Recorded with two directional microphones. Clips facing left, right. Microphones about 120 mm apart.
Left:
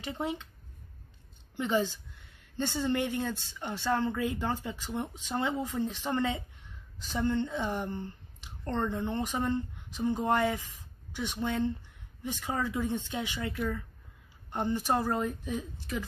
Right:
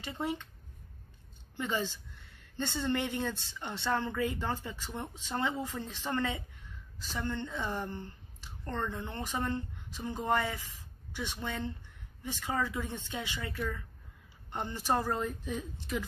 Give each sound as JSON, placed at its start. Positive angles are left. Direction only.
{"t": 0.0, "sound": "speech", "side_deg": 15}
{"t": 1.6, "sound": "speech", "side_deg": 15}